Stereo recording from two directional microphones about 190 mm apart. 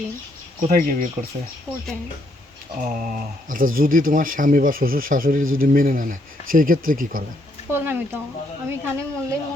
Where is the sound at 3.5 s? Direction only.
45° right (ahead or behind).